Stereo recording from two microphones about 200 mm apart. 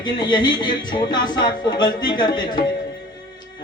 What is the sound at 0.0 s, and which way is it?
Speech, 20° left (ahead or behind).